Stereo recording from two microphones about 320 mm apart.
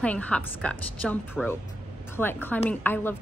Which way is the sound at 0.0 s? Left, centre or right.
Centre.